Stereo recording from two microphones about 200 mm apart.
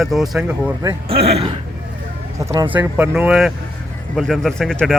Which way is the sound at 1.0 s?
30° right (ahead or behind).